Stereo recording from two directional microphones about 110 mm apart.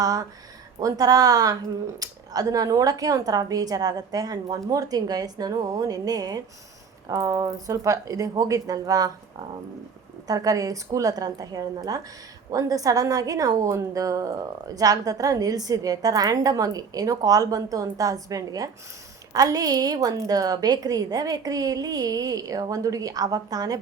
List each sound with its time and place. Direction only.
0.0 s speech: 35° right (ahead or behind)
10.2 s speech: 35° right (ahead or behind)